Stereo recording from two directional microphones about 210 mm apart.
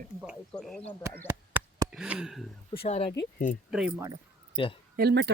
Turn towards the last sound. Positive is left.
turn(degrees=-50)  # may be behind; listen again after turning